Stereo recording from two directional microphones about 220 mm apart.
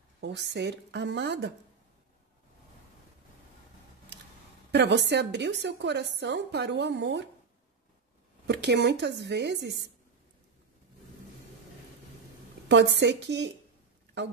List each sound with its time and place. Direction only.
0.2 s a woman's voice: 50° right (ahead or behind)
4.6 s a woman's voice: 50° right (ahead or behind)
8.5 s a woman's voice: 50° right (ahead or behind)
12.6 s a woman's voice: 50° right (ahead or behind)